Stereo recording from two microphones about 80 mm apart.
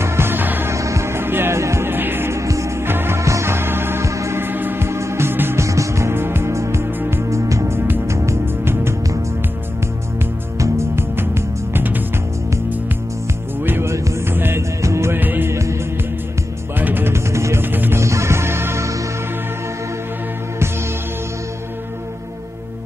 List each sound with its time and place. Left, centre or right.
0.0 s music: right
0.7 s music: right
5.7 s music: right
10.6 s music: right
11.7 s music: right
13.7 s music: right
15.1 s music: right
15.5 s music: right
16.7 s music: right
18.0 s music: right